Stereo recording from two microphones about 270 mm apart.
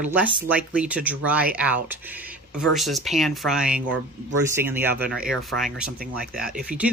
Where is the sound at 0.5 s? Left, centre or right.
Centre.